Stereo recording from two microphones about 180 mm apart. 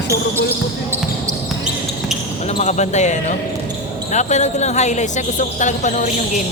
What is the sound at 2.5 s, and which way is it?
Speech, 40° left (ahead or behind).